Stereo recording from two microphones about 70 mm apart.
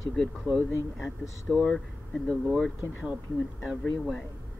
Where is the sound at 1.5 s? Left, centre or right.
Centre.